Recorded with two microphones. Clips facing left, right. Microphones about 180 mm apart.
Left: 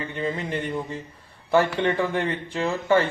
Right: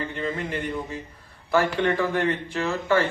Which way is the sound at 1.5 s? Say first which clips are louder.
Left 1 dB; 20° left (ahead or behind).